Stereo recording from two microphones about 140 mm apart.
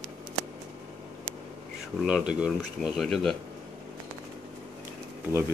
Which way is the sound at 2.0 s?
5° right (ahead or behind).